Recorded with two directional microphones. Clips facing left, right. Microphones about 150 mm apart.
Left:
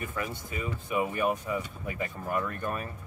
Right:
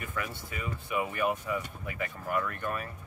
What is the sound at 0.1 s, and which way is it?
Speech, 25° left (ahead or behind).